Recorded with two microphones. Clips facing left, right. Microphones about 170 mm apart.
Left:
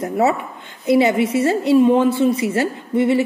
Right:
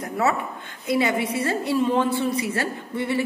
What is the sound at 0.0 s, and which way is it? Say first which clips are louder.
A woman's voice: left 5 dB; 25° left (ahead or behind).